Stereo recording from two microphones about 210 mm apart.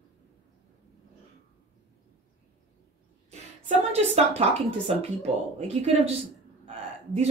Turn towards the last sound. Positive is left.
turn(degrees=-30)  # may be behind; listen again after turning